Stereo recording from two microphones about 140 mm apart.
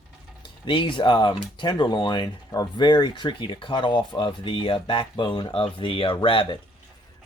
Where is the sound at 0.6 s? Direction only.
35° left (ahead or behind).